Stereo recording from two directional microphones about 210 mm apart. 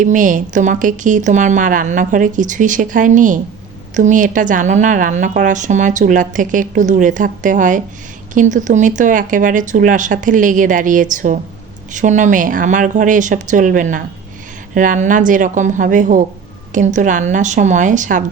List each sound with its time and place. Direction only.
0.0 s a woman's voice: 40° right (ahead or behind)